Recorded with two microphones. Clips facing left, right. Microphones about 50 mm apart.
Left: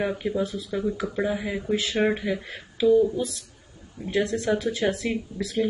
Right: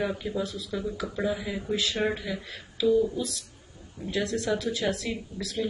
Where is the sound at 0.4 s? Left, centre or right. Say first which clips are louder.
Left 4 dB; left.